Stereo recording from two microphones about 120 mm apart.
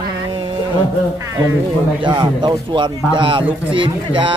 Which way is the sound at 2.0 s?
40° right (ahead or behind).